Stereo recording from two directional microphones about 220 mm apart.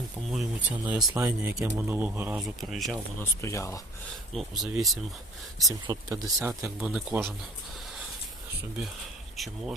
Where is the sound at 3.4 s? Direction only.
15° left (ahead or behind).